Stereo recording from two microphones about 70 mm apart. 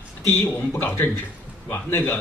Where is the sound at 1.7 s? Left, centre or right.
Left.